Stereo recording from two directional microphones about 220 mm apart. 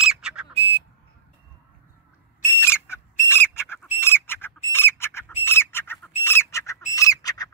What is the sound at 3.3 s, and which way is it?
Bird, 10° left (ahead or behind).